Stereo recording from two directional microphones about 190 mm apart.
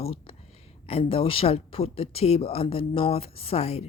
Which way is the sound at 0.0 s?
30° left (ahead or behind).